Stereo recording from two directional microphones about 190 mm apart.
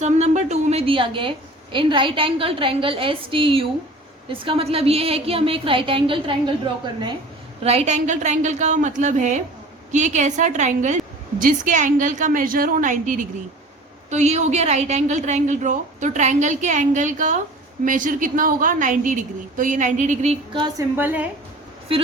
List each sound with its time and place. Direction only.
0.0 s a woman's voice: 35° right (ahead or behind)
7.6 s a woman's voice: 35° right (ahead or behind)
20.5 s a woman's voice: 25° right (ahead or behind)
20.9 s a woman's voice: 10° right (ahead or behind)